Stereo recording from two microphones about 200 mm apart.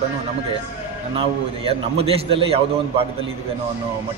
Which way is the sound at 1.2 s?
30° right (ahead or behind).